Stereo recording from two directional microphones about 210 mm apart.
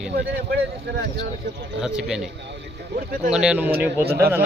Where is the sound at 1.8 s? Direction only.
5° right (ahead or behind).